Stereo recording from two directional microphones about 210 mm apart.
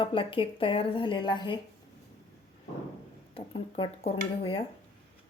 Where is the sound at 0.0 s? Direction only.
25° left (ahead or behind).